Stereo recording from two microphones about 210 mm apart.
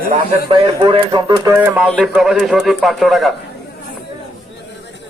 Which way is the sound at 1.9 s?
Centre (ahead or behind).